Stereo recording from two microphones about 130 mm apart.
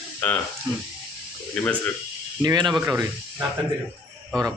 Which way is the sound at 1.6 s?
5° left (ahead or behind).